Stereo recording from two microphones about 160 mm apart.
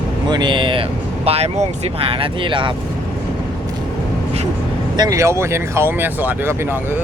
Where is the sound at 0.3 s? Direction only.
30° right (ahead or behind).